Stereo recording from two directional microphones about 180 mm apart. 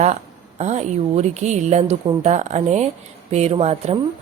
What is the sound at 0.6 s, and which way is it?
Speech, 40° right (ahead or behind).